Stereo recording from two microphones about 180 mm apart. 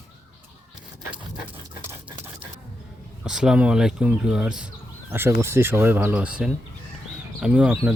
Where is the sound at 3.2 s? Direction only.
5° right (ahead or behind).